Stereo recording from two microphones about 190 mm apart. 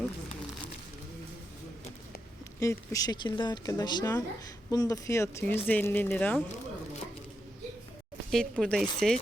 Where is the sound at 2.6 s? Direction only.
15° left (ahead or behind).